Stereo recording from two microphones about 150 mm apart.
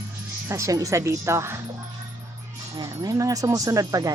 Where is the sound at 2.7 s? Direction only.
25° right (ahead or behind).